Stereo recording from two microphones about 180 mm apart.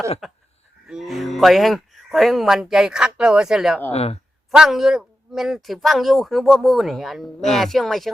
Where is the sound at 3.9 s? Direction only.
35° left (ahead or behind).